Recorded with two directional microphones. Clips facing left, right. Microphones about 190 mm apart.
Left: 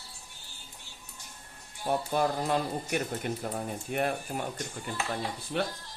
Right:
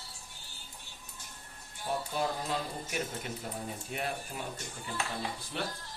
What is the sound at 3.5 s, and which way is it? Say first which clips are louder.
Speech: left 7 dB; 55° left (ahead or behind).